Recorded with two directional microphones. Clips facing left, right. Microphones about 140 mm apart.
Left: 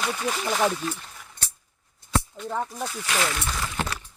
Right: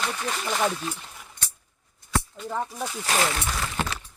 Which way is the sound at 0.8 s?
10° right (ahead or behind).